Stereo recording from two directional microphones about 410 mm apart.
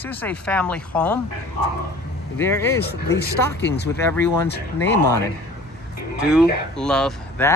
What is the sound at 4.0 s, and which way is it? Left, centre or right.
Speech, centre.